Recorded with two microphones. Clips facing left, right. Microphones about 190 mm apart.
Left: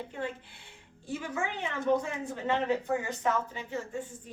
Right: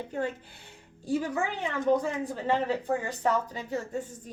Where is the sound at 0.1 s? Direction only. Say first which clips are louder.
Right 8 dB; 40° right (ahead or behind).